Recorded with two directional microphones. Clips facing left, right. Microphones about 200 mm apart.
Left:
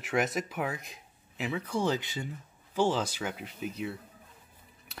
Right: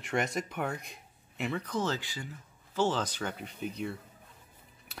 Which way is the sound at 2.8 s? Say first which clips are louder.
Left 2 dB; 10° left (ahead or behind).